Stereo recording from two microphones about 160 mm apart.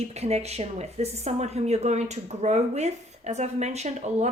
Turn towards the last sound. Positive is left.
turn(degrees=-45)  # may be behind; listen again after turning